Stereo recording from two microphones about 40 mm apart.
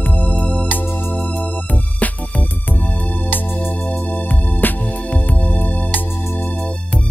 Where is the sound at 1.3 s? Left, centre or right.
Left.